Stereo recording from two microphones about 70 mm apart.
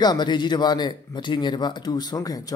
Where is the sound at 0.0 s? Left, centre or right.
Left.